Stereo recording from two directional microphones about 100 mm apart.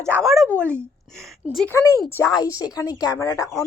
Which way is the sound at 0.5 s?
25° right (ahead or behind).